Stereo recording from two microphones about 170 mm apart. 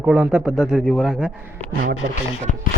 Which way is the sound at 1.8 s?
70° right (ahead or behind).